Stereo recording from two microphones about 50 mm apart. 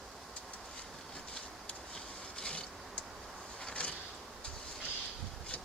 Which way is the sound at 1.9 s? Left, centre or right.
Centre.